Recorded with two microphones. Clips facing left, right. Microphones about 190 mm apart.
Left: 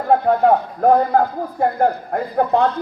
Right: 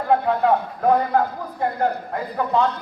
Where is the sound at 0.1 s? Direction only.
45° left (ahead or behind).